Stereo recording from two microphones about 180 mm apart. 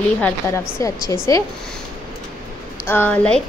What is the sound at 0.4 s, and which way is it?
Speech, 15° left (ahead or behind).